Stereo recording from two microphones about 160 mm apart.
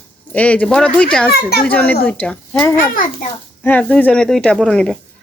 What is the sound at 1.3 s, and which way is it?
Speech, 75° left (ahead or behind).